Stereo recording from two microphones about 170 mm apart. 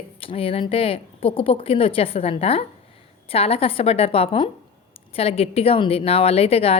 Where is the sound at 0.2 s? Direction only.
35° left (ahead or behind).